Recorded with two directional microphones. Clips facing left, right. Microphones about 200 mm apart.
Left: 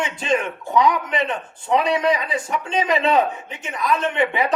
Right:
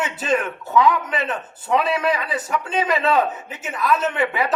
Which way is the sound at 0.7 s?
15° left (ahead or behind).